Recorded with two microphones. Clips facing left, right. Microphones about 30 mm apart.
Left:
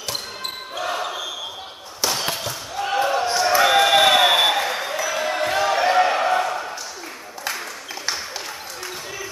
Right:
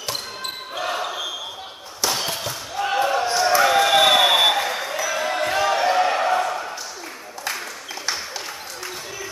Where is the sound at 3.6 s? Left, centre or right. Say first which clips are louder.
Left 2 dB; centre.